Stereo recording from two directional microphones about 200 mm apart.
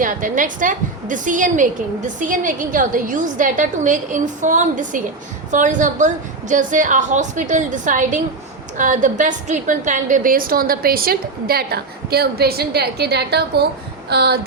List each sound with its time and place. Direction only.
0.0 s a woman's voice: 40° right (ahead or behind)